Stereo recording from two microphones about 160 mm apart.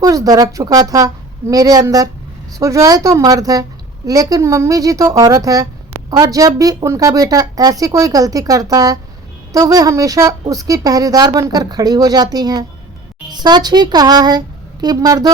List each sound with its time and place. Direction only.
0.0 s a woman's voice: 20° right (ahead or behind)